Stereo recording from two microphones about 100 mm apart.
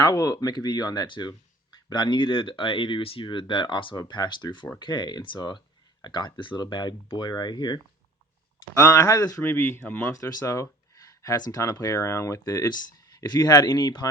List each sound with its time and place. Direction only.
0.0 s speech: 35° left (ahead or behind); by 3.9 s 55° left (ahead or behind)
3.9 s speech: 40° left (ahead or behind)
8.7 s speech: 30° left (ahead or behind)